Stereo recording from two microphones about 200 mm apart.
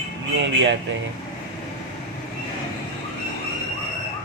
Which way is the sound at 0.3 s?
65° right (ahead or behind).